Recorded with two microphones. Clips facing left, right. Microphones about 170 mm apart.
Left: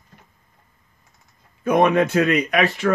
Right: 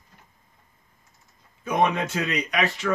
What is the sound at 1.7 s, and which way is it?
Speech, 60° left (ahead or behind).